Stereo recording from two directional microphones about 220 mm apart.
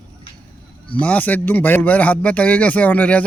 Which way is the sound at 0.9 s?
5° left (ahead or behind).